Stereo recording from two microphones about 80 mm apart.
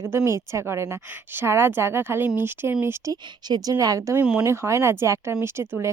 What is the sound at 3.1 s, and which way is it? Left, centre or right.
Speech, right.